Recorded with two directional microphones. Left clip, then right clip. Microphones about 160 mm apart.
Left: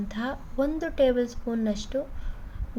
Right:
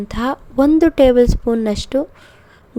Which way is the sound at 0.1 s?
90° right.